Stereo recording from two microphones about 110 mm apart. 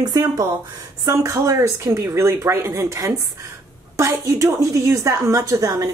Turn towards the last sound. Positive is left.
turn(degrees=-30)  # may be behind; listen again after turning